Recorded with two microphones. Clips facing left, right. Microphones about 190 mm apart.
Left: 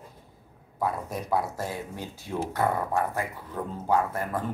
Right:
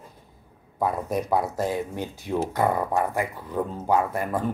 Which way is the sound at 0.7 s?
20° right (ahead or behind).